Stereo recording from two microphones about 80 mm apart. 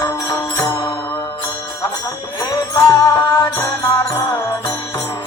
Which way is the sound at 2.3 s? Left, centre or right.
Left.